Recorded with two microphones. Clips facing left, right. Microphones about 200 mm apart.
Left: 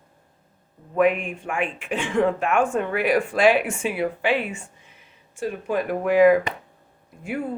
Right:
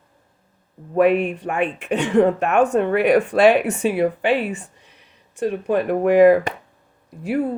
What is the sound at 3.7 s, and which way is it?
Speech, 40° right (ahead or behind).